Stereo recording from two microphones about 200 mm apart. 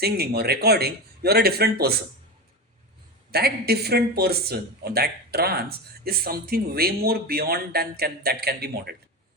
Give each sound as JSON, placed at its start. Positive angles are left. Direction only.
{"t": 0.0, "sound": "speech", "side_deg": -50}
{"t": 3.3, "sound": "speech", "side_deg": -50}